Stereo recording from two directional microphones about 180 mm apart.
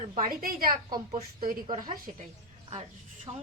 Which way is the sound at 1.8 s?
45° right (ahead or behind).